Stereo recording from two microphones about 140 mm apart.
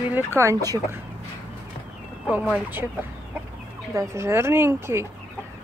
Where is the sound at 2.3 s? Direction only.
10° right (ahead or behind).